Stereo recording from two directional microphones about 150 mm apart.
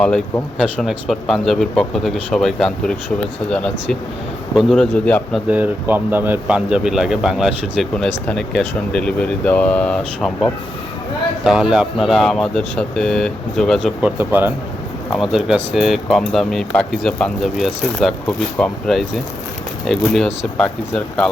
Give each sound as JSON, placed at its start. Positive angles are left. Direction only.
{"t": 0.0, "sound": "speech", "side_deg": 5}
{"t": 5.5, "sound": "speech", "side_deg": -10}
{"t": 14.0, "sound": "speech", "side_deg": -10}
{"t": 15.1, "sound": "speech", "side_deg": 0}